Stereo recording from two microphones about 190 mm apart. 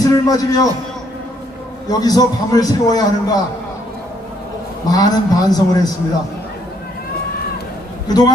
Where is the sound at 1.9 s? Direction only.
20° left (ahead or behind).